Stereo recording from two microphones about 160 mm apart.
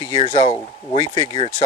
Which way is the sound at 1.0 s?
30° left (ahead or behind).